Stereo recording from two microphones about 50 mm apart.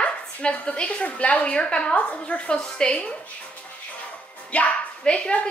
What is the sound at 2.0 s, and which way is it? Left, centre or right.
Speech, left.